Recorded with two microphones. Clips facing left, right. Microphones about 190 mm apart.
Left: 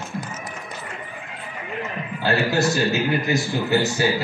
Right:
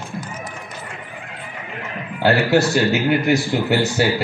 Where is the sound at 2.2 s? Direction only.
75° right (ahead or behind).